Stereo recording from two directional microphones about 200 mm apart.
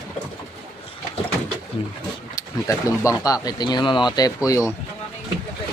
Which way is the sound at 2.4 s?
15° left (ahead or behind).